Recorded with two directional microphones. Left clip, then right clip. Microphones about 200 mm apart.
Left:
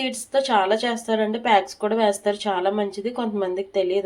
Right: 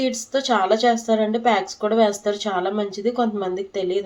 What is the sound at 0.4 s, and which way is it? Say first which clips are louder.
Speech: right 4 dB; 30° left (ahead or behind).